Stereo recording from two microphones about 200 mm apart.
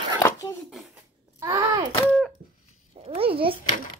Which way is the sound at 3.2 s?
25° right (ahead or behind).